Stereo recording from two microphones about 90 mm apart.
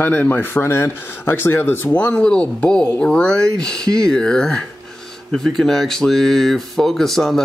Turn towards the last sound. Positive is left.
turn(degrees=5)  # may be behind; listen again after turning